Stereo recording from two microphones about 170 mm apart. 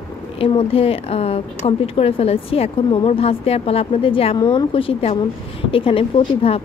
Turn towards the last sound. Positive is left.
turn(degrees=35)  # may be behind; listen again after turning